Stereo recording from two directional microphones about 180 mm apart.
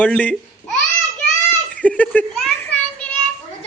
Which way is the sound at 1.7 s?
5° left (ahead or behind).